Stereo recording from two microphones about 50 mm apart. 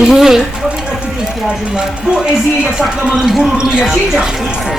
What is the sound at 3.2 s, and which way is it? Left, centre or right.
Speech, centre.